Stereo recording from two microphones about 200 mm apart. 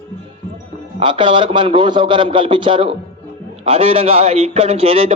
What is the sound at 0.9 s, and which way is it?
A man's voice, 25° right (ahead or behind).